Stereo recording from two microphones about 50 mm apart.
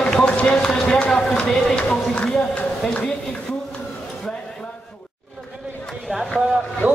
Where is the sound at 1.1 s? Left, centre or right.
Centre.